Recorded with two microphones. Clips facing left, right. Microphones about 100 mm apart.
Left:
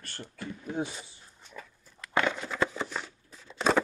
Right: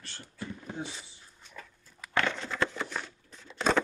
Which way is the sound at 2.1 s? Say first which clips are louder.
Left 2 dB; 15° left (ahead or behind).